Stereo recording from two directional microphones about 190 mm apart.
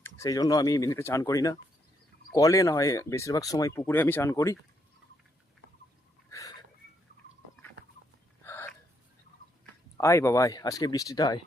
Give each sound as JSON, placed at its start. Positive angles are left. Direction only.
{"t": 0.0, "sound": "speech", "side_deg": 15}
{"t": 6.3, "sound": "a sound", "side_deg": 20}
{"t": 8.4, "sound": "hiccup", "side_deg": 10}
{"t": 10.0, "sound": "speech", "side_deg": 15}